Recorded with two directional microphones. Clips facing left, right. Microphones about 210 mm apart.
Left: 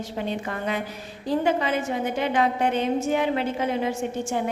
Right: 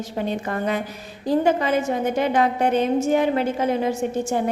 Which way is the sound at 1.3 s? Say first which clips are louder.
Right 4 dB; 45° right (ahead or behind).